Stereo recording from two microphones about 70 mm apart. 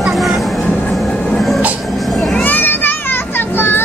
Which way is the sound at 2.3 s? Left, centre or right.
Left.